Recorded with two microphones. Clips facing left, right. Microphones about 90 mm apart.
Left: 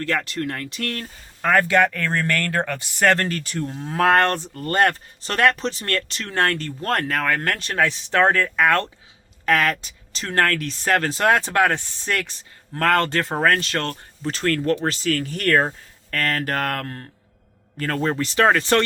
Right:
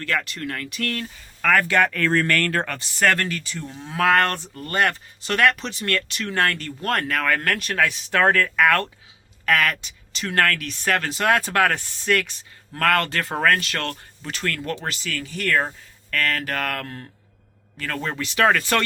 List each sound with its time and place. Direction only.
0.0 s speech: 35° left (ahead or behind)
3.2 s speech: 45° left (ahead or behind); by 8.9 s 20° left (ahead or behind)
9.5 s speech: 30° left (ahead or behind)
11.3 s speech: 20° left (ahead or behind)
12.0 s speech: 30° left (ahead or behind)